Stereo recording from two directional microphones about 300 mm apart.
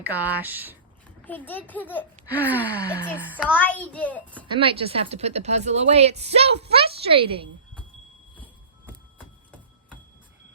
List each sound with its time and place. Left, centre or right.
0.0 s a child's voice: centre
1.5 s a child's voice: centre
2.3 s a child's voice: centre
4.4 s a woman's voice: centre